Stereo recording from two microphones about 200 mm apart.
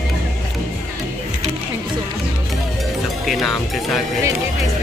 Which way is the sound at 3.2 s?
Centre (ahead or behind).